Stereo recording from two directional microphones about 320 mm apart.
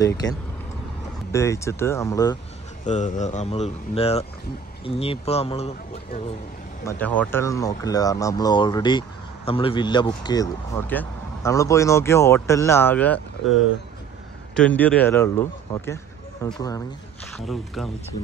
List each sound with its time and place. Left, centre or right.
1.3 s speech: centre
2.8 s speech: left
6.8 s speech: centre